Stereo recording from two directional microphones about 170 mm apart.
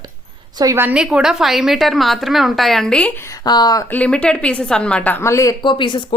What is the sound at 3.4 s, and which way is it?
Speech, 25° left (ahead or behind).